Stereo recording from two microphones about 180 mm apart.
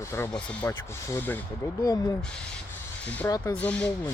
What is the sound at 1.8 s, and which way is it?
Speech, 20° left (ahead or behind).